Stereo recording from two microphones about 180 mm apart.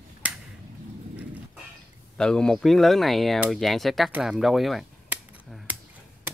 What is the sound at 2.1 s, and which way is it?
Speech, 5° left (ahead or behind).